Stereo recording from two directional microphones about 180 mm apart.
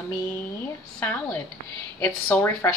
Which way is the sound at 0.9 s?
10° left (ahead or behind).